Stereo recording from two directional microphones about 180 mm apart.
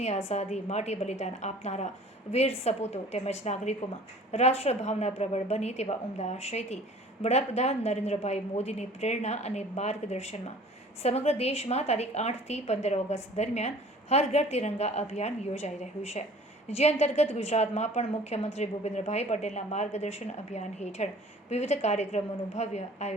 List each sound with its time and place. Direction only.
0.3 s a woman's voice: 40° left (ahead or behind)